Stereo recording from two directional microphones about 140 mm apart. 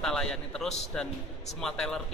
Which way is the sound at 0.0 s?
5° left (ahead or behind).